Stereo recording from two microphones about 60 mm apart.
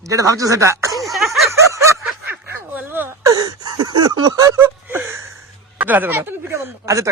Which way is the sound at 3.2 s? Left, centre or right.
Right.